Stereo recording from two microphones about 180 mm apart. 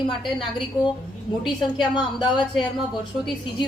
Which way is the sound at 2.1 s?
25° left (ahead or behind).